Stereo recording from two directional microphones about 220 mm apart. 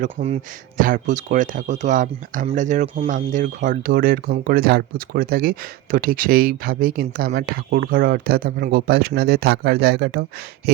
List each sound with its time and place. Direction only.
0.0 s speech: 30° right (ahead or behind); by 10.2 s 45° right (ahead or behind)